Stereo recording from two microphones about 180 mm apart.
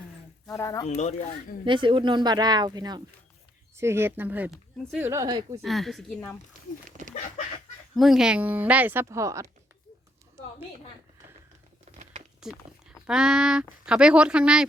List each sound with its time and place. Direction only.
0.4 s speech: 20° left (ahead or behind)
0.9 s speech: 40° left (ahead or behind)
1.6 s speech: 25° right (ahead or behind)
5.6 s speech: centre (ahead or behind)
7.0 s a sound: 45° right (ahead or behind)
7.9 s speech: centre (ahead or behind)
11.9 s patter: 40° right (ahead or behind)
12.4 s speech: 5° right (ahead or behind)